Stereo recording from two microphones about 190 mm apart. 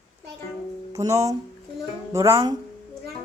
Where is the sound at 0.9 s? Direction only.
15° right (ahead or behind).